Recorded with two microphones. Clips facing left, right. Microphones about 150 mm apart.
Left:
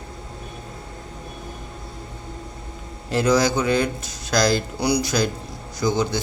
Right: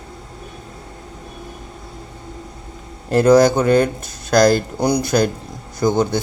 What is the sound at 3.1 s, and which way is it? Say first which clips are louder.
Speech: right 7 dB; 50° right (ahead or behind).